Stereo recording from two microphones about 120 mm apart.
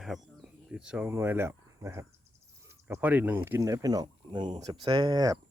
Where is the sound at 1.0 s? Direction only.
20° right (ahead or behind).